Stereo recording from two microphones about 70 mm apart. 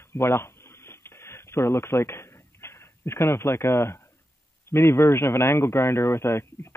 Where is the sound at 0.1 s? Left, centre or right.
Left.